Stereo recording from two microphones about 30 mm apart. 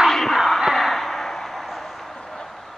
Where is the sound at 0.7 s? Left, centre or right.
Centre.